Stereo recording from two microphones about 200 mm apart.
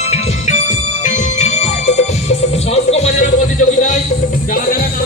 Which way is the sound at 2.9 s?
35° left (ahead or behind).